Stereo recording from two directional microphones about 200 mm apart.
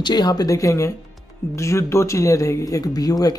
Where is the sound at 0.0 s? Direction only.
20° left (ahead or behind).